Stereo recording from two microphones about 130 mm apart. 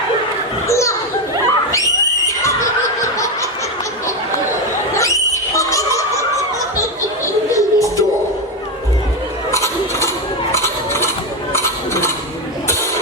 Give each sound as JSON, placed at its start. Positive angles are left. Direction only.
{"t": 0.7, "sound": "children playing", "side_deg": 25}
{"t": 1.5, "sound": "screaming", "side_deg": 25}
{"t": 4.9, "sound": "a sound", "side_deg": 25}
{"t": 7.5, "sound": "music", "side_deg": 25}
{"t": 9.5, "sound": "mechanisms", "side_deg": 20}
{"t": 10.5, "sound": "a sound", "side_deg": 20}